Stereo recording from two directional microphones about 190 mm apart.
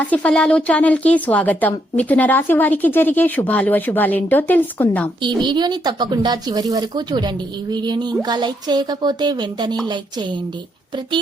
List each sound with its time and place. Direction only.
0.0 s a woman's voice: 5° left (ahead or behind)
5.2 s a woman's voice: 25° right (ahead or behind)